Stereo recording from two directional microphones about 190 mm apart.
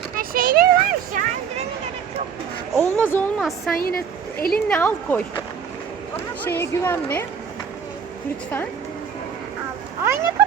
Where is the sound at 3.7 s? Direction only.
50° left (ahead or behind).